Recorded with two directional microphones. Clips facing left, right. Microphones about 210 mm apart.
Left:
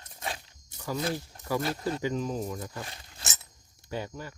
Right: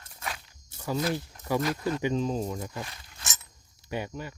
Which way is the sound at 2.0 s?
25° right (ahead or behind).